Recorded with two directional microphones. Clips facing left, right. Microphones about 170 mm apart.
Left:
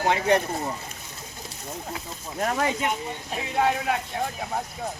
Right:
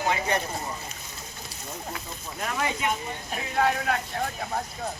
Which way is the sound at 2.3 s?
40° left (ahead or behind).